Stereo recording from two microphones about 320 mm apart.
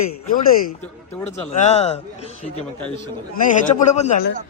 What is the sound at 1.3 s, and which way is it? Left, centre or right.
Speech, left.